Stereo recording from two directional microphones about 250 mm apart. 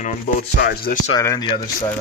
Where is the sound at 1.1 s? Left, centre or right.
Centre.